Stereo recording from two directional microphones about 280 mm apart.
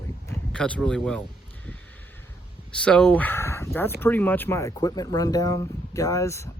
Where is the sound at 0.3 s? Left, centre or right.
Centre.